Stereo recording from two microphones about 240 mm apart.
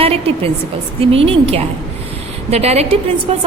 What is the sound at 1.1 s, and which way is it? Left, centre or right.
A woman's voice, right.